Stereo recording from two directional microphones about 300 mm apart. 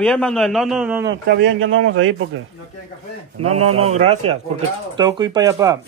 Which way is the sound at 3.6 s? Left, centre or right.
Right.